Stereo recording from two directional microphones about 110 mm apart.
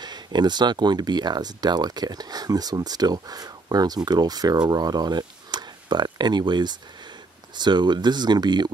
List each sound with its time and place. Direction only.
0.0 s speech: 40° right (ahead or behind)